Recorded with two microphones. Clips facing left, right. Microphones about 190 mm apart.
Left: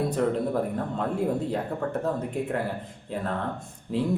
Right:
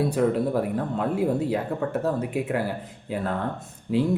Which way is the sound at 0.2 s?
5° right (ahead or behind).